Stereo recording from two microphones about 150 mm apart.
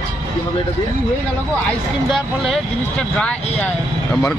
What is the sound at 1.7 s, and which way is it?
Speech, centre (ahead or behind).